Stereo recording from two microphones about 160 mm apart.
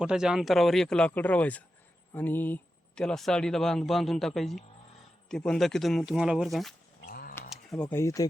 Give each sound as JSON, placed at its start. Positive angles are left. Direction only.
{"t": 0.0, "sound": "speech", "side_deg": -5}
{"t": 7.1, "sound": "a sound", "side_deg": 65}
{"t": 7.5, "sound": "camera", "side_deg": 0}
{"t": 7.9, "sound": "speech", "side_deg": 15}